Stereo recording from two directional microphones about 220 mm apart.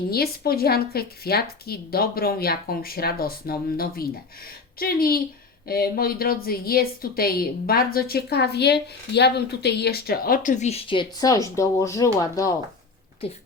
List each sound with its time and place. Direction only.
0.1 s a woman's voice: 45° left (ahead or behind); by 12.5 s 15° left (ahead or behind)